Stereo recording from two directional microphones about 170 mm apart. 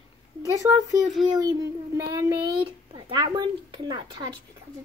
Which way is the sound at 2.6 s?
30° right (ahead or behind).